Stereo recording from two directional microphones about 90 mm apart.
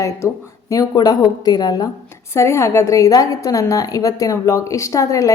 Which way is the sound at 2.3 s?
30° left (ahead or behind).